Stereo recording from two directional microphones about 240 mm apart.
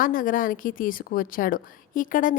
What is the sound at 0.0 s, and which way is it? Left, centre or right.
A woman's voice, left.